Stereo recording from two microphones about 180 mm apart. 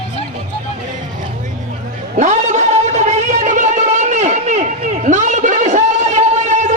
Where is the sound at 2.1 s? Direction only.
40° right (ahead or behind).